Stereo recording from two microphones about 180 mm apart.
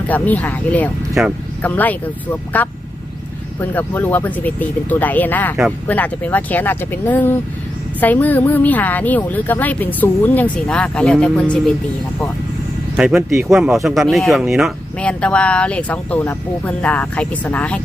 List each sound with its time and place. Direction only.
0.1 s speech: 10° left (ahead or behind)
13.0 s speech: centre (ahead or behind)